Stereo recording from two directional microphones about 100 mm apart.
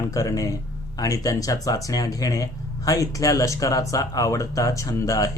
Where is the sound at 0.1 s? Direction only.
35° left (ahead or behind).